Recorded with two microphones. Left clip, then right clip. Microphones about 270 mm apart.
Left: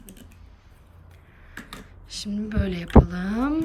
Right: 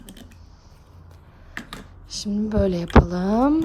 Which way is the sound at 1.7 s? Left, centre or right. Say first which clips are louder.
Right 3 dB; centre.